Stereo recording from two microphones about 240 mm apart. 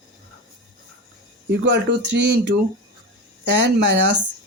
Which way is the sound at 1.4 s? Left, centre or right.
Right.